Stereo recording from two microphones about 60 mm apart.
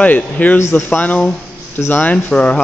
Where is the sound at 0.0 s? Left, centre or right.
Left.